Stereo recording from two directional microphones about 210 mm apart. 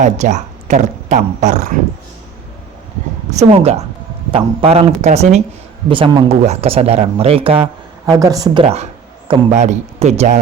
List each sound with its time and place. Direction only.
0.0 s speech: 35° right (ahead or behind)
3.2 s speech: 30° right (ahead or behind)
8.6 s speech: 30° right (ahead or behind)